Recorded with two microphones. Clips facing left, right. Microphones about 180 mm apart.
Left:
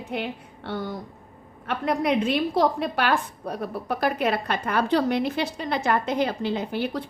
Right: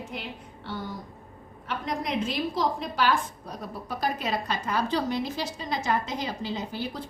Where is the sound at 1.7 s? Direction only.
65° left (ahead or behind).